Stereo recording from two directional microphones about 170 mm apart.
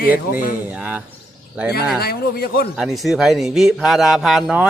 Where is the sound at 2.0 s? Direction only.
65° left (ahead or behind).